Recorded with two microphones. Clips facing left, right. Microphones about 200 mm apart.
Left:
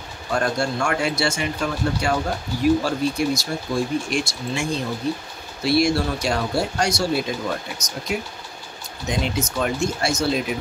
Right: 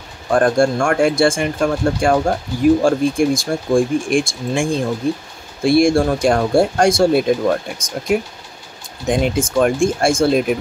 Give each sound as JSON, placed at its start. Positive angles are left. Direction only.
{"t": 0.3, "sound": "speech", "side_deg": -50}